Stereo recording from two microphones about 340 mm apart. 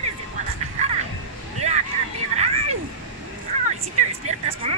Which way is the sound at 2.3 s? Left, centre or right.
Centre.